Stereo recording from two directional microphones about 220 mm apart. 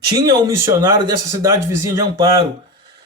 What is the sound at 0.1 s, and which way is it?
Speech, 15° right (ahead or behind).